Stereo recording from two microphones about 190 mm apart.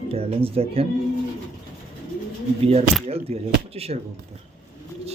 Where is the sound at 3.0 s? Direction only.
30° right (ahead or behind).